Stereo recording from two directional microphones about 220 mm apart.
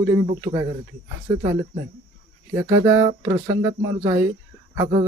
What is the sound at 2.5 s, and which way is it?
Speech, 10° right (ahead or behind).